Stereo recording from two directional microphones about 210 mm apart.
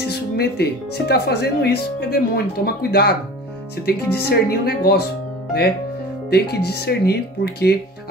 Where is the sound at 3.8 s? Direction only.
50° left (ahead or behind).